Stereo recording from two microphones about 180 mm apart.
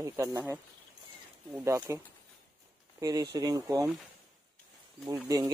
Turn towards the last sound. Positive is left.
turn(degrees=-20)  # may be behind; listen again after turning